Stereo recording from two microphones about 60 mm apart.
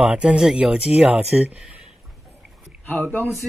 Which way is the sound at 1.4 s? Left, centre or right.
Right.